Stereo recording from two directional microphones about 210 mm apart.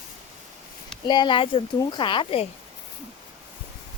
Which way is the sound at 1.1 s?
20° left (ahead or behind).